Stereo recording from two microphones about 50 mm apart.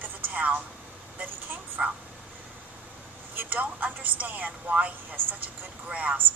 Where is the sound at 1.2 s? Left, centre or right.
Right.